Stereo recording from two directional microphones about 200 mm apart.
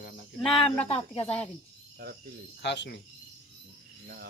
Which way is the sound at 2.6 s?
60° left (ahead or behind).